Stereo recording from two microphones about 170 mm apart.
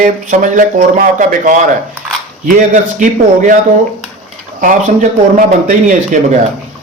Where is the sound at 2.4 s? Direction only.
50° right (ahead or behind).